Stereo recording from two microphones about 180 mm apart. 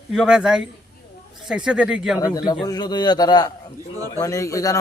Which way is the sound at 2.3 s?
20° left (ahead or behind).